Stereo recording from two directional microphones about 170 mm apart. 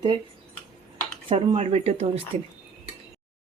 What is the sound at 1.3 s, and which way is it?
Speech, 35° right (ahead or behind).